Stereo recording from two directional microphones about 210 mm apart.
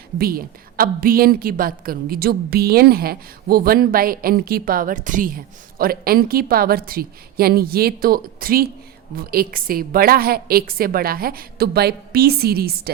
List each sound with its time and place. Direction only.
0.2 s a woman's voice: 45° right (ahead or behind)